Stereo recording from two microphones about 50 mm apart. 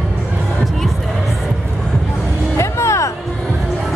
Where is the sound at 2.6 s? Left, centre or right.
Left.